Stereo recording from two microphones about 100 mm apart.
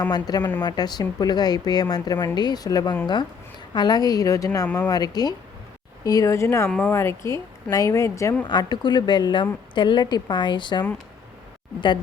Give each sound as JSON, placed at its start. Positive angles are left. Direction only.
{"t": 0.1, "sound": "a woman's voice", "side_deg": 40}
{"t": 6.7, "sound": "speech", "side_deg": 5}
{"t": 6.9, "sound": "speech", "side_deg": 30}
{"t": 8.4, "sound": "a woman's voice", "side_deg": 50}